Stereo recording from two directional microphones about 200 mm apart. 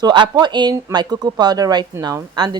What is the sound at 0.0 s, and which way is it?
A woman's voice, 20° right (ahead or behind).